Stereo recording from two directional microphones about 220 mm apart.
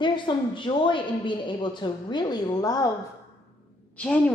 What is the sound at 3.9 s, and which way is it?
Speech, 5° left (ahead or behind).